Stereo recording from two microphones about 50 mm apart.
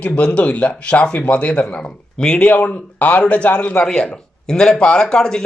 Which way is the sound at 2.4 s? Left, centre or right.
Left.